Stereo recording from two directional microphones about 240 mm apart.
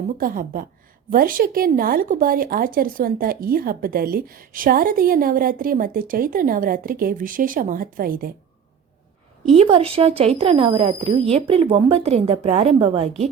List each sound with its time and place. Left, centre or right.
0.2 s speech: right
9.5 s speech: right